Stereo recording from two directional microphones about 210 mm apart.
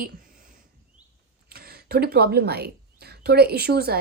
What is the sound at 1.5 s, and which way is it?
Speech, 45° right (ahead or behind).